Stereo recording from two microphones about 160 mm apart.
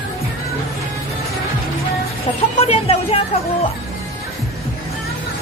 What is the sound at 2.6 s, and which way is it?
Speech, 40° left (ahead or behind).